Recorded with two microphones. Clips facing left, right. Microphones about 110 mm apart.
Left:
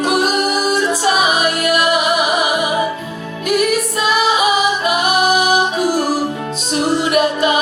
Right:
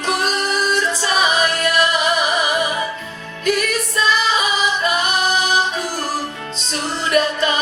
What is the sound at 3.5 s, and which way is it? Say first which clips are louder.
Music: left 4 dB; 15° left (ahead or behind).